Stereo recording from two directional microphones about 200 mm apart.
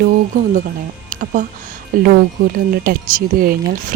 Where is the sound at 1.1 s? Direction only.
40° right (ahead or behind).